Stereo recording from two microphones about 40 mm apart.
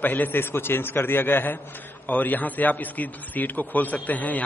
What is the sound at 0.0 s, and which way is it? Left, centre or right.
A man's voice, left.